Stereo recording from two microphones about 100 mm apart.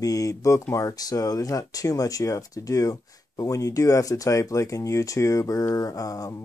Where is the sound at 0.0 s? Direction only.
35° left (ahead or behind).